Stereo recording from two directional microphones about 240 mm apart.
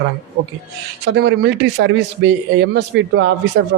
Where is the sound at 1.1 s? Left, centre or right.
Right.